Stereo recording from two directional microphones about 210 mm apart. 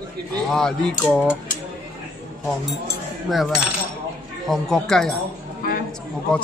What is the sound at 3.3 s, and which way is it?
Speech, centre (ahead or behind).